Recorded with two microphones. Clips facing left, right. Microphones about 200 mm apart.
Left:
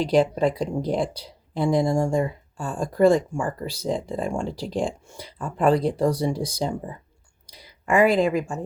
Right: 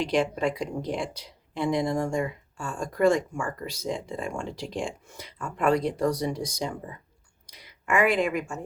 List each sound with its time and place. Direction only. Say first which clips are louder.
0.0 s speech: left 5 dB; 35° left (ahead or behind)